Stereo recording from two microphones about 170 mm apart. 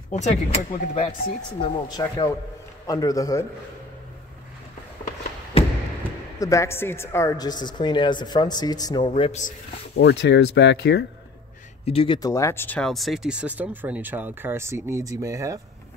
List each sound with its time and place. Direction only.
0.1 s speech: 40° left (ahead or behind)
1.6 s speech: 25° left (ahead or behind)
5.5 s thump: 35° left (ahead or behind)
6.4 s speech: 15° left (ahead or behind)
9.9 s speech: 80° left
11.8 s speech: 35° left (ahead or behind)
12.2 s speech: 20° left (ahead or behind); by 15.6 s 20° right (ahead or behind)